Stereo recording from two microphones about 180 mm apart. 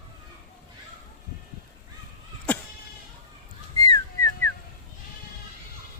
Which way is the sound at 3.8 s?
20° left (ahead or behind).